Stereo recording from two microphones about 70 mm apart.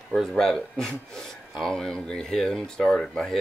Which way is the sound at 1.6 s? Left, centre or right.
Centre.